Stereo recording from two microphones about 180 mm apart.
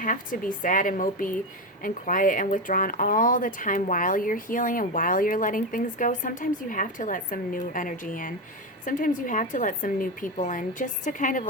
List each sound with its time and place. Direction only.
0.0 s speech: 45° left (ahead or behind)